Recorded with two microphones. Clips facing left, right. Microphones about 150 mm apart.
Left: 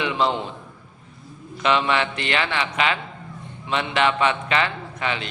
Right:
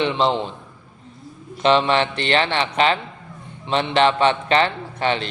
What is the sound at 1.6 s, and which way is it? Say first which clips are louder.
A man's voice: right 4 dB; 30° right (ahead or behind).